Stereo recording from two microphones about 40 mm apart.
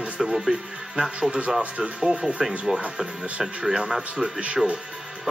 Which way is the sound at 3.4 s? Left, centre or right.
Right.